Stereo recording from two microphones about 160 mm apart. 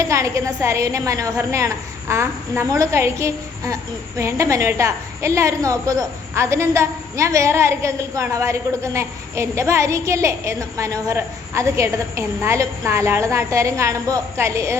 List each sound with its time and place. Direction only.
0.0 s a woman's voice: 20° right (ahead or behind)